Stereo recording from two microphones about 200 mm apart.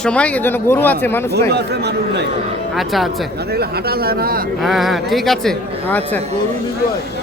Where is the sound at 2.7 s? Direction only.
Centre (ahead or behind).